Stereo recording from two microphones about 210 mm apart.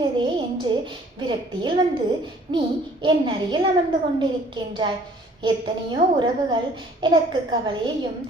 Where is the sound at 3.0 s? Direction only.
25° right (ahead or behind).